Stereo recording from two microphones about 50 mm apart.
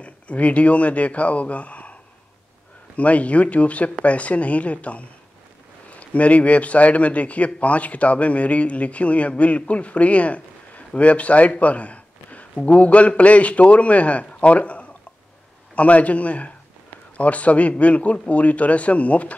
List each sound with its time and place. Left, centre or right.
0.0 s speech: left
3.0 s a man's voice: left